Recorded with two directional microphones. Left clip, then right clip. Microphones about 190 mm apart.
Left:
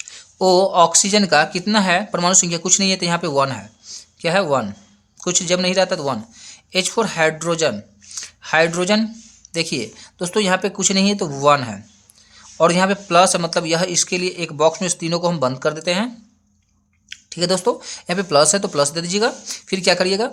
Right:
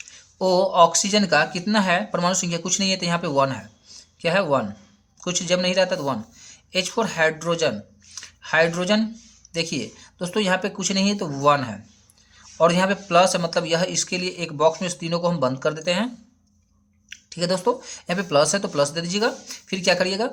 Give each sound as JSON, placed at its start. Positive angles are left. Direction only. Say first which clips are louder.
{"t": 0.0, "sound": "speech", "louder": "left 6 dB", "side_deg": 25}